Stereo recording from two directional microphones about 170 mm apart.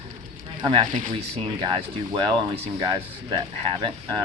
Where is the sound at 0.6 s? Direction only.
25° right (ahead or behind).